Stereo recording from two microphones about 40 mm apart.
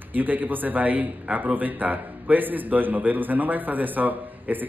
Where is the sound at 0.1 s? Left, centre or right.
Right.